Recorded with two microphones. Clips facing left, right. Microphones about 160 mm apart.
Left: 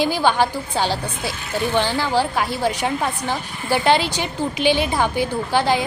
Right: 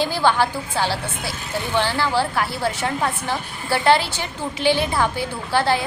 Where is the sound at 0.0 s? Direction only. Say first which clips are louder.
Left 1 dB; 15° left (ahead or behind).